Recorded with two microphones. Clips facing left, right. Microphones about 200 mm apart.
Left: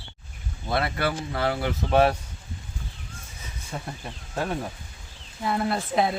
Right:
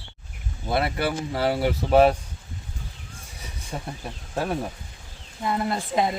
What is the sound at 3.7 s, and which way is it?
Speech, 15° right (ahead or behind).